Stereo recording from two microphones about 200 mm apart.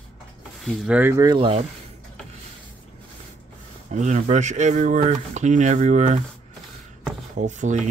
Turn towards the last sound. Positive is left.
turn(degrees=-40)  # may be behind; listen again after turning